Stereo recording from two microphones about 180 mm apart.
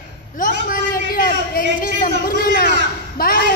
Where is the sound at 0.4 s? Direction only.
50° left (ahead or behind).